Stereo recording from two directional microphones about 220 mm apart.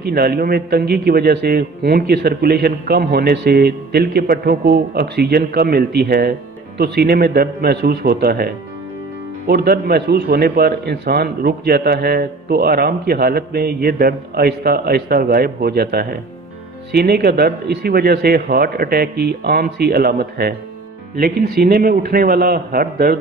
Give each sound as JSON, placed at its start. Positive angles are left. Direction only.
{"t": 0.0, "sound": "a man's voice", "side_deg": -45}